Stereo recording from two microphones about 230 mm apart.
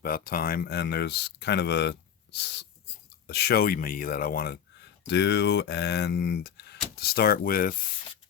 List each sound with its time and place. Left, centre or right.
0.0 s speech: left